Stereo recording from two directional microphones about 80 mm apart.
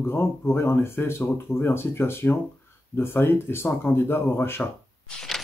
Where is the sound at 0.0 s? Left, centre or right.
Left.